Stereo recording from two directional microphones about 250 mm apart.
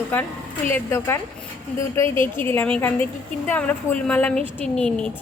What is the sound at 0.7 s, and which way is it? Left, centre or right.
A woman's voice, centre.